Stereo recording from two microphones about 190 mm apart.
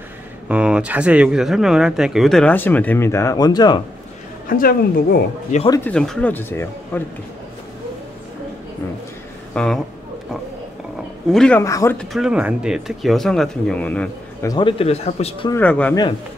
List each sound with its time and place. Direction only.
0.5 s speech: 5° right (ahead or behind); by 3.8 s 20° left (ahead or behind)
4.5 s speech: 50° left (ahead or behind)
5.9 s speech: 5° left (ahead or behind)
9.5 s speech: 5° left (ahead or behind)
11.3 s speech: 5° left (ahead or behind)
11.6 s speech: 15° left (ahead or behind)
12.0 s speech: centre (ahead or behind)
14.5 s speech: 25° left (ahead or behind)
15.5 s speech: 5° left (ahead or behind)